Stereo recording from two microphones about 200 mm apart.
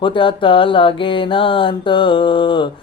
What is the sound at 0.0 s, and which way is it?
Mantra, 25° left (ahead or behind).